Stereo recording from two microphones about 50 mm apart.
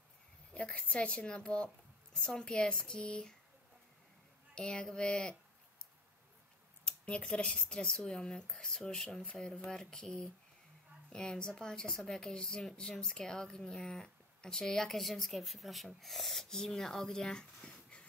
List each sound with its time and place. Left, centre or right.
0.7 s a woman's voice: left
4.6 s speech: centre
6.8 s speech: left; by 9.2 s centre
9.2 s a woman's voice: centre
17.6 s dog: left